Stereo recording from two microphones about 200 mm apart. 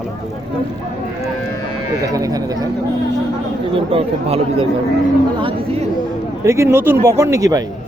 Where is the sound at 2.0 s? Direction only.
15° right (ahead or behind).